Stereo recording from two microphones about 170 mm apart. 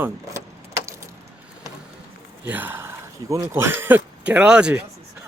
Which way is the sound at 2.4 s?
10° right (ahead or behind).